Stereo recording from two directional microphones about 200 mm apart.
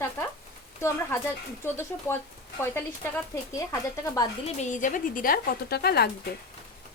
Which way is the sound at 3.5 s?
15° left (ahead or behind).